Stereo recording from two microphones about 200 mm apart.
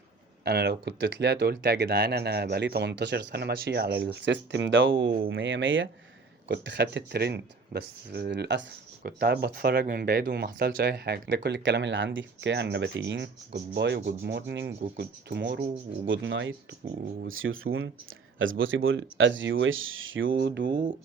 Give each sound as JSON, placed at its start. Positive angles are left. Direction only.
{"t": 0.4, "sound": "speech", "side_deg": -50}
{"t": 6.5, "sound": "speech", "side_deg": -60}
{"t": 16.0, "sound": "speech", "side_deg": -70}
{"t": 17.2, "sound": "speech", "side_deg": -90}
{"t": 18.3, "sound": "speech", "side_deg": -75}
{"t": 20.3, "sound": "speech", "side_deg": -55}